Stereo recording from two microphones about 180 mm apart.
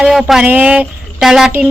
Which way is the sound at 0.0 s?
Centre (ahead or behind).